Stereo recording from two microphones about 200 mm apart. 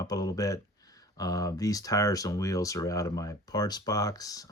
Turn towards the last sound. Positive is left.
turn(degrees=20)  # may be behind; listen again after turning